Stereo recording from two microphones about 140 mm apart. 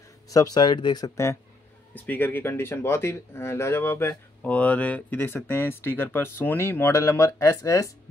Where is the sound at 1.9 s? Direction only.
15° left (ahead or behind).